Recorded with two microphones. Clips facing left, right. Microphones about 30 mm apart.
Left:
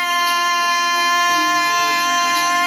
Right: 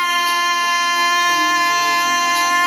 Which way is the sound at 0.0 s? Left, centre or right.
Centre.